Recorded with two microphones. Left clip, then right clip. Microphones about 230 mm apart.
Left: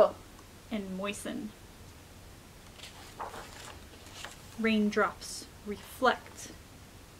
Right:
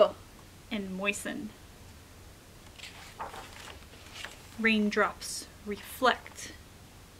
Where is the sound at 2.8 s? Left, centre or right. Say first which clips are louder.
Right 1 dB; centre.